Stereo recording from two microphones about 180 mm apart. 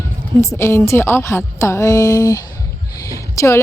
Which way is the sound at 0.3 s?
15° left (ahead or behind).